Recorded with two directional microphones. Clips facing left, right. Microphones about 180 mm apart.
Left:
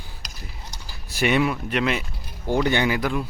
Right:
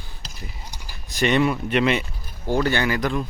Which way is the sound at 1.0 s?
10° left (ahead or behind).